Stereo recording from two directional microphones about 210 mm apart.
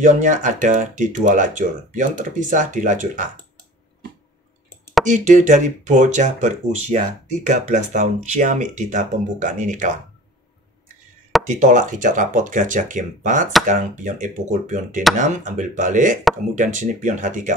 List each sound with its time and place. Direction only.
0.0 s speech: 35° right (ahead or behind)
5.0 s speech: 35° right (ahead or behind)
11.4 s speech: 35° right (ahead or behind)